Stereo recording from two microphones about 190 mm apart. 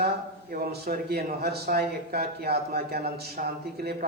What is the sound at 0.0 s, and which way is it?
A man's voice, 55° right (ahead or behind).